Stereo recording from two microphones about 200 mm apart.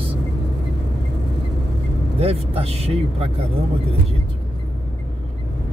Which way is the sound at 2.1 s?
30° right (ahead or behind).